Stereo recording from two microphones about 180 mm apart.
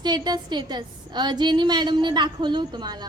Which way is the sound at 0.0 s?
25° right (ahead or behind).